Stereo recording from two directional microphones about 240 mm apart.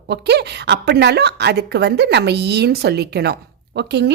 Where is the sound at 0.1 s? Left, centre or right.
Right.